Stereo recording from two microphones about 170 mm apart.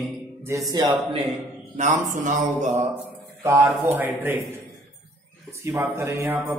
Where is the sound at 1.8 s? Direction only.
45° right (ahead or behind).